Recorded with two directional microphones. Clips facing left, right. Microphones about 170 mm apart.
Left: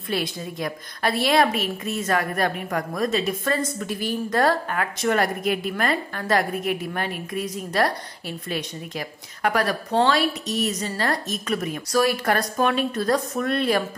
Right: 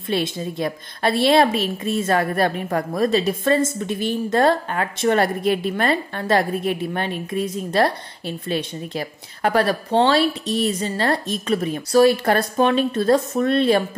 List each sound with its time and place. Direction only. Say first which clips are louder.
0.1 s a woman's voice: right 4 dB; 25° right (ahead or behind)